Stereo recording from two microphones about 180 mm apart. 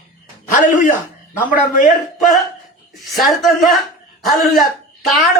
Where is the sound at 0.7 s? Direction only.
45° left (ahead or behind).